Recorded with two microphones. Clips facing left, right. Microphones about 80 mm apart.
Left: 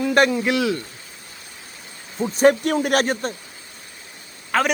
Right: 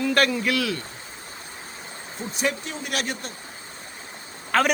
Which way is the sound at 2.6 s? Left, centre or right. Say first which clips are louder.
Left 10 dB; left.